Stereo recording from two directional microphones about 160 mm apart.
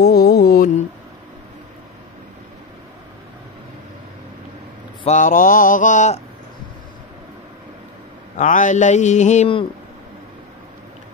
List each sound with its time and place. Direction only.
0.0 s mantra: 80° left
5.0 s mantra: 50° left (ahead or behind)
8.4 s mantra: 50° left (ahead or behind)